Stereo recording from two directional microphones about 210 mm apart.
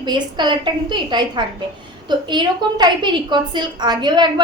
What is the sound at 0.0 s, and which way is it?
A woman's voice, 20° right (ahead or behind).